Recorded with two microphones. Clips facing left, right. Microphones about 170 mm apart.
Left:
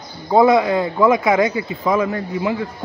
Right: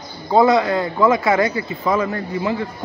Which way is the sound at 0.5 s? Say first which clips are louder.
Left 1 dB; 15° left (ahead or behind).